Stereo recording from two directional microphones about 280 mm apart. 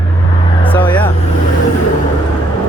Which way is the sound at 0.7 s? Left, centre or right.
Centre.